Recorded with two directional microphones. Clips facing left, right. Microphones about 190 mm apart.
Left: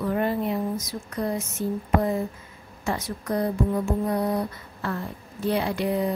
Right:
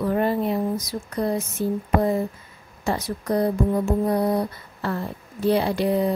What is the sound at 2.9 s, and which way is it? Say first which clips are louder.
Speech: right 3 dB; 35° right (ahead or behind).